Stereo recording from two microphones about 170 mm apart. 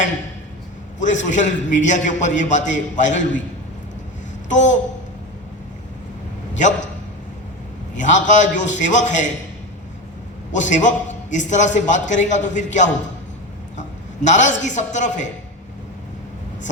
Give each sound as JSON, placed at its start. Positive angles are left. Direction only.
{"t": 0.9, "sound": "a man's voice", "side_deg": 45}
{"t": 4.4, "sound": "a sound", "side_deg": 45}
{"t": 7.9, "sound": "a man's voice", "side_deg": 45}
{"t": 10.5, "sound": "a man's voice", "side_deg": 45}